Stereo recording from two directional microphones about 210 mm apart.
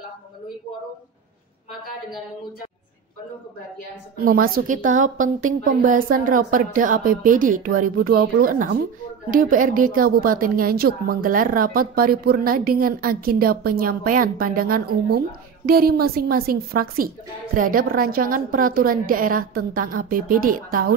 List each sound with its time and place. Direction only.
4.2 s a woman's voice: 45° right (ahead or behind)